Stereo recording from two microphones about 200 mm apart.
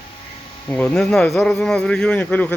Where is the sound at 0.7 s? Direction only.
5° left (ahead or behind).